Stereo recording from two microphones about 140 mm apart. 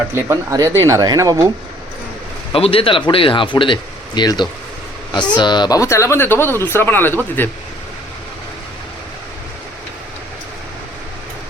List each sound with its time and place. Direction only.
0.1 s speech: 20° right (ahead or behind)
2.5 s speech: 40° left (ahead or behind); by 7.5 s 15° left (ahead or behind)